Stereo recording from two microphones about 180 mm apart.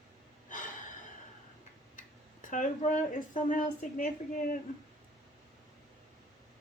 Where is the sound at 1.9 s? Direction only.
45° left (ahead or behind).